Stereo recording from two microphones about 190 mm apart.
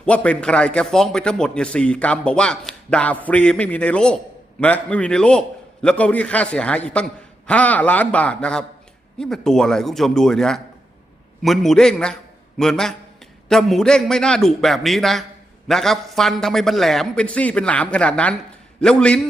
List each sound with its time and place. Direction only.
0.0 s a man's voice: 5° left (ahead or behind)